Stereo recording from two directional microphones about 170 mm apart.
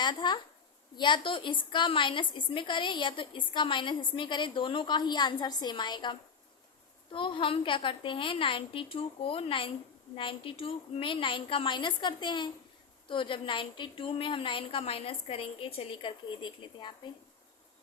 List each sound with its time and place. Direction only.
0.0 s a woman's voice: 25° left (ahead or behind)